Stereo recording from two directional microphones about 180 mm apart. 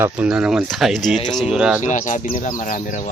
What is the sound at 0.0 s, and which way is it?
Speech, 5° right (ahead or behind).